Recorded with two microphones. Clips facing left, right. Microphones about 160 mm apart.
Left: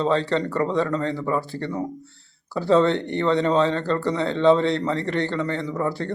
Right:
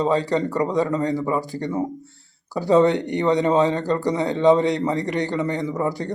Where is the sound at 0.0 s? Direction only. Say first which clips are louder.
Right 1 dB; 15° right (ahead or behind).